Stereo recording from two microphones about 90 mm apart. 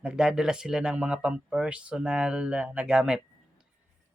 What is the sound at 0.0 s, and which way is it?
Speech, 10° right (ahead or behind).